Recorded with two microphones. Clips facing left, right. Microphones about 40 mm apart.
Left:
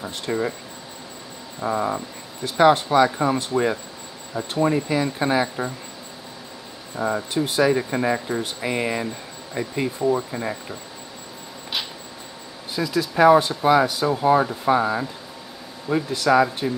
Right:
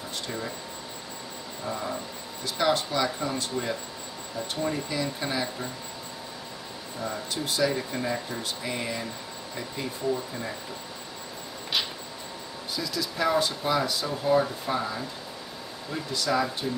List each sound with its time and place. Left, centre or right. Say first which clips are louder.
0.3 s speech: left 12 dB; left
1.6 s speech: left 9 dB; left
2.4 s speech: left 9 dB; left
7.0 s speech: left 9 dB; left
12.7 s speech: left 10 dB; left